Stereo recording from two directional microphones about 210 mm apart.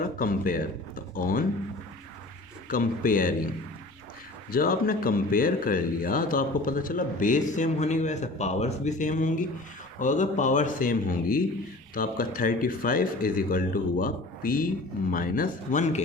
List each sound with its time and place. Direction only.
0.0 s speech: 40° left (ahead or behind)
2.6 s speech: 40° left (ahead or behind)
4.5 s speech: 45° left (ahead or behind)